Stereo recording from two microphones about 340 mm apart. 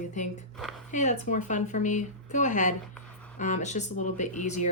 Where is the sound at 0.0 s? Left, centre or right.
Left.